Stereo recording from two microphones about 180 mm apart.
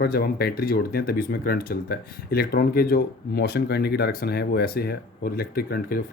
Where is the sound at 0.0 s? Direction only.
60° left (ahead or behind).